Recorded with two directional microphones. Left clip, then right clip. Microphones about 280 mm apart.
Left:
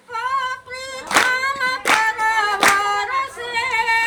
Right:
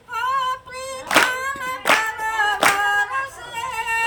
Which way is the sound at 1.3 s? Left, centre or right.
Right.